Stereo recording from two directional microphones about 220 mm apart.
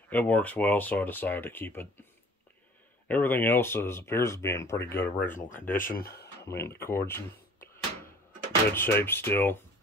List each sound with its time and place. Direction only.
0.1 s speech: 5° left (ahead or behind)
3.1 s speech: 10° left (ahead or behind)
5.8 s speech: 40° left (ahead or behind)
6.4 s a sound: 10° left (ahead or behind)
8.7 s speech: 10° left (ahead or behind)